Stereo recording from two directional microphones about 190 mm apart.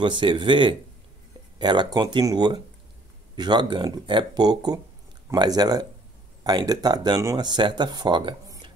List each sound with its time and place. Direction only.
0.0 s speech: 25° right (ahead or behind)